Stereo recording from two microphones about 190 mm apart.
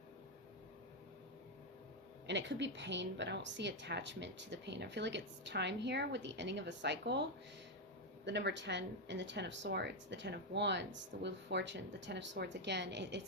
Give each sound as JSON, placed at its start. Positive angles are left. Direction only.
{"t": 2.2, "sound": "a woman's voice", "side_deg": -70}